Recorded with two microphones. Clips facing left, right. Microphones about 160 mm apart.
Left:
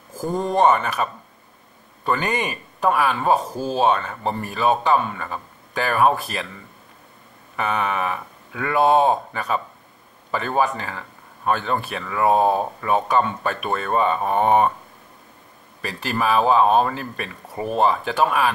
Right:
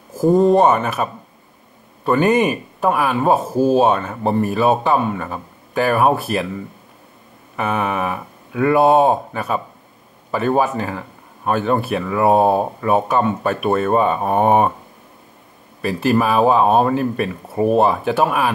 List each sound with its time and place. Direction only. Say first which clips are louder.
0.4 s speech: right 3 dB; 5° right (ahead or behind)
3.5 s speech: right 10 dB; 45° right (ahead or behind)
3.8 s speech: right 3 dB; 5° right (ahead or behind)
7.5 s speech: right 3 dB; 5° right (ahead or behind)
10.6 s speech: right 3 dB; 5° right (ahead or behind)
15.8 s speech: right 8 dB; 5° right (ahead or behind)